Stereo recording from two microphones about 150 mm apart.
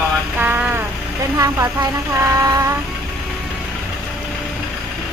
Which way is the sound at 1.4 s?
20° right (ahead or behind).